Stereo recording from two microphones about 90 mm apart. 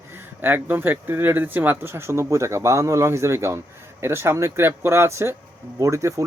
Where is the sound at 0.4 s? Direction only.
20° right (ahead or behind).